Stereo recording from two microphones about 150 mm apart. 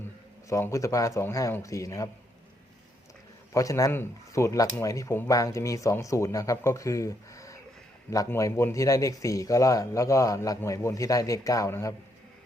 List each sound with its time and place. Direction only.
0.4 s speech: 20° left (ahead or behind)
3.5 s speech: 20° left (ahead or behind)